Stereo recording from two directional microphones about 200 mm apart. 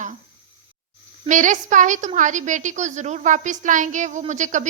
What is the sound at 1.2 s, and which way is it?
A woman's voice, 40° right (ahead or behind).